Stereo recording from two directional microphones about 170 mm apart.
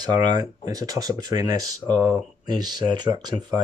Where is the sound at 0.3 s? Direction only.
20° right (ahead or behind).